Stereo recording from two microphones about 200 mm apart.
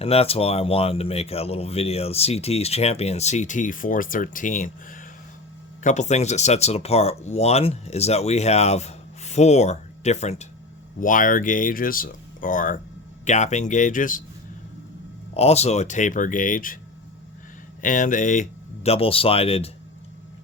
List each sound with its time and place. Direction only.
0.0 s speech: 30° left (ahead or behind)
15.4 s speech: 30° left (ahead or behind)
17.8 s speech: 40° left (ahead or behind)